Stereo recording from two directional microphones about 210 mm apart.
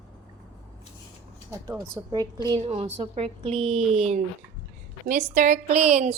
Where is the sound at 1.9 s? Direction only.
20° right (ahead or behind).